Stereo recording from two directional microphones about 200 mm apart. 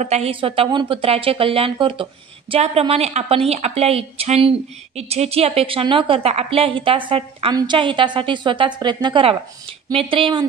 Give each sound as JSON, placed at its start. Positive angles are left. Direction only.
{"t": 0.0, "sound": "a woman's voice", "side_deg": -30}